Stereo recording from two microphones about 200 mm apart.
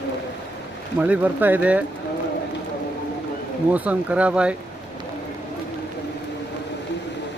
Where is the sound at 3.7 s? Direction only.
5° right (ahead or behind).